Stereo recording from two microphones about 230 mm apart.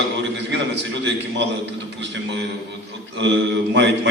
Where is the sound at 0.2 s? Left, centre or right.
Right.